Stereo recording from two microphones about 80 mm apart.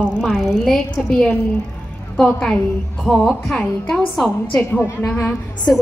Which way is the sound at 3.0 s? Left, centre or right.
Centre.